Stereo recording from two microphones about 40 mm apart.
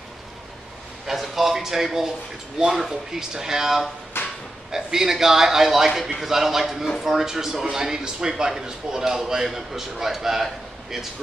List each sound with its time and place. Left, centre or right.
1.0 s speech: centre
4.1 s a sound: left
4.6 s speech: centre